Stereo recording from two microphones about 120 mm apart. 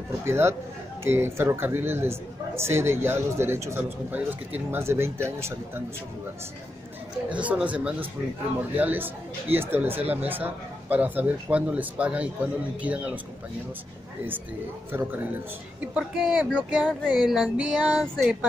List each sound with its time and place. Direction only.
0.2 s a man's voice: 20° right (ahead or behind)
7.3 s speech: 10° right (ahead or behind)
14.9 s speech: 15° right (ahead or behind)
16.8 s female singing: 5° left (ahead or behind)